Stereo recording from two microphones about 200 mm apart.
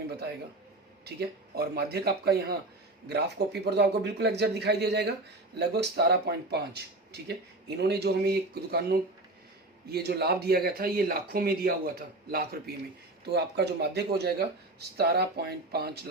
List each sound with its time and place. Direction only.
0.1 s a man's voice: 55° right (ahead or behind)
7.8 s speech: 55° right (ahead or behind)
9.9 s speech: 55° right (ahead or behind)